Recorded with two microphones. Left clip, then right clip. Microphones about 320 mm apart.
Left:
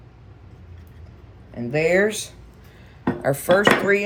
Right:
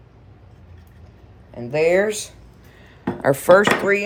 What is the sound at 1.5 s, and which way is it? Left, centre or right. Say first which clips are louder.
Speech: right 2 dB; centre.